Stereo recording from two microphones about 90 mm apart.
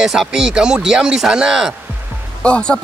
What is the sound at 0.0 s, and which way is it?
Speech, 5° right (ahead or behind).